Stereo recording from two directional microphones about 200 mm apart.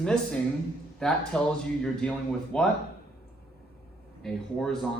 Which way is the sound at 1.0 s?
5° left (ahead or behind).